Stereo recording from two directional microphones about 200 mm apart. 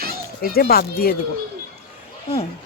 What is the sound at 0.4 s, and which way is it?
Speech, 50° left (ahead or behind).